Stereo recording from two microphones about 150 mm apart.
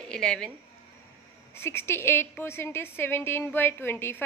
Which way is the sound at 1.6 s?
15° left (ahead or behind).